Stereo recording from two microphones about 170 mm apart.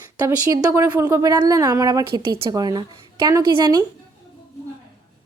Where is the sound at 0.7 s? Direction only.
20° right (ahead or behind).